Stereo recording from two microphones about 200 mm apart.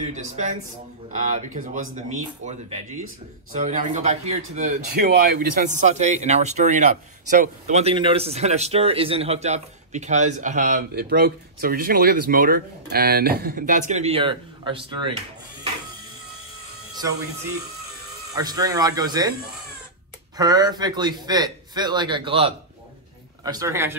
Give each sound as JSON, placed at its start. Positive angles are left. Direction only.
{"t": 0.0, "sound": "a man's voice", "side_deg": -35}
{"t": 18.3, "sound": "a man's voice", "side_deg": -20}
{"t": 20.3, "sound": "a man's voice", "side_deg": -20}